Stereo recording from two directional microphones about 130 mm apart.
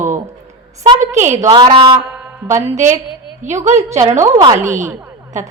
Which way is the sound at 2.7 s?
65° right (ahead or behind).